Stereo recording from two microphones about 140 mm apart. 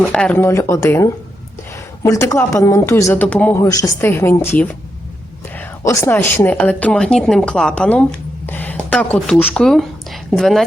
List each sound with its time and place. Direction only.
0.0 s speech: 5° left (ahead or behind)
5.8 s a woman's voice: 20° left (ahead or behind); by 10.6 s centre (ahead or behind)